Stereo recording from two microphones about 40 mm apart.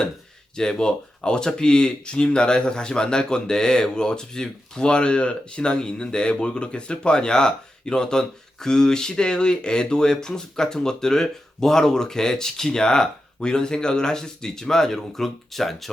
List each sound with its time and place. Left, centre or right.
0.5 s speech: centre